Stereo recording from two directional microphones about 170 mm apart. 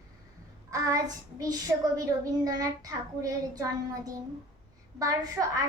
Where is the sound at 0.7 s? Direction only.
20° right (ahead or behind).